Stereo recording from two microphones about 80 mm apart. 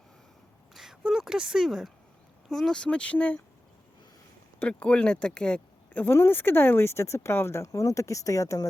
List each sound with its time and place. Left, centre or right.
0.7 s a sound: centre
2.5 s speech: centre
4.7 s speech: centre
6.1 s speech: left